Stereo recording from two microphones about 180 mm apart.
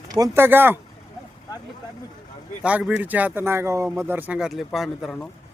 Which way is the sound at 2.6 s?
5° right (ahead or behind).